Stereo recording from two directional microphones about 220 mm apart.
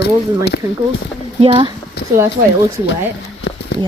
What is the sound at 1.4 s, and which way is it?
Speech, 25° right (ahead or behind).